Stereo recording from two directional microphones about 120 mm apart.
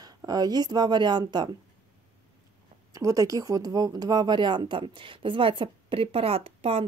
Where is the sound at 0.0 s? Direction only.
30° right (ahead or behind).